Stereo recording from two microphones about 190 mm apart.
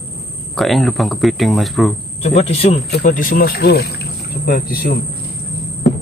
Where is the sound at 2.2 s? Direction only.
35° left (ahead or behind).